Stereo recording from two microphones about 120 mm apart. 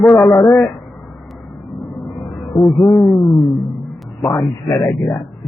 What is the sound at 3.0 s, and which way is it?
Speech, centre (ahead or behind).